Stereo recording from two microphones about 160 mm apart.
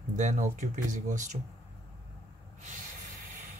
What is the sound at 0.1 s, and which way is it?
Speech, 50° right (ahead or behind).